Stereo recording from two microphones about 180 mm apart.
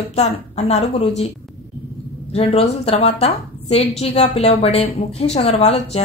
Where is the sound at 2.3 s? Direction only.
35° left (ahead or behind).